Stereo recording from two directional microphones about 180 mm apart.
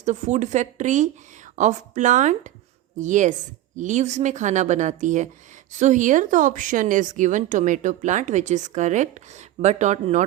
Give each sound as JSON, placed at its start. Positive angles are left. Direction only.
{"t": 0.0, "sound": "speech", "side_deg": -40}